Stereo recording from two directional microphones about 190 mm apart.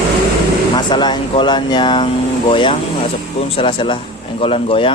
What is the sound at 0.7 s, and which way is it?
A man's voice, 25° left (ahead or behind).